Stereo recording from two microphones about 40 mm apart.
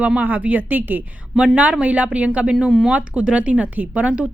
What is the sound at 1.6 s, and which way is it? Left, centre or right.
A woman's voice, right.